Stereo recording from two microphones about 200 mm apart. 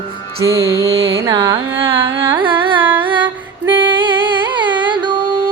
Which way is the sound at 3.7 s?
25° right (ahead or behind).